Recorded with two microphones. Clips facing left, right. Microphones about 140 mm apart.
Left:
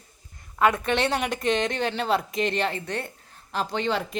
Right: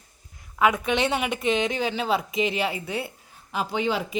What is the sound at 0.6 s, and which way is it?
A woman's voice, centre (ahead or behind).